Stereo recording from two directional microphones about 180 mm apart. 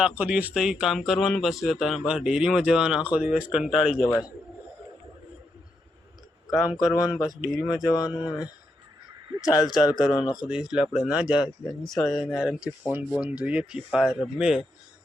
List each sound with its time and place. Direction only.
0.0 s a man's voice: 5° right (ahead or behind)
6.7 s speech: 20° left (ahead or behind)
7.4 s a man's voice: 5° right (ahead or behind)
9.4 s speech: 20° left (ahead or behind)
10.5 s a man's voice: 5° right (ahead or behind)